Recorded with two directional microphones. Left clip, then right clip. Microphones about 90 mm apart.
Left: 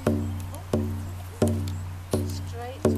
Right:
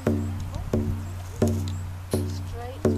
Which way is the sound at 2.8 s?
25° left (ahead or behind).